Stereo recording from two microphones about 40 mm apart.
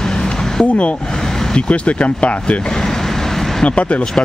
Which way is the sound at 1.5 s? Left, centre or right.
Left.